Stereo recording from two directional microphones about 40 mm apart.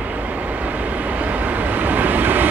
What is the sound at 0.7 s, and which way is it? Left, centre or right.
Vehicle, right.